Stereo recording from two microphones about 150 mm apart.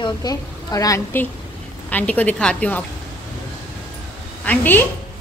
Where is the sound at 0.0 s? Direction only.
25° left (ahead or behind).